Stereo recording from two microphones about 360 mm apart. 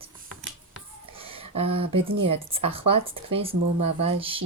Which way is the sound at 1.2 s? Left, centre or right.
Centre.